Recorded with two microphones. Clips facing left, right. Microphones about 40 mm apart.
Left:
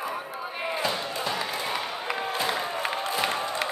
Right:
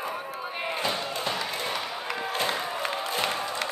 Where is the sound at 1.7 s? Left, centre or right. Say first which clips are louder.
Left 1 dB; centre.